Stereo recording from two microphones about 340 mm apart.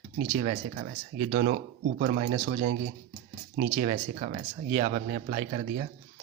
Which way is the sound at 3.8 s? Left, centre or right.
Centre.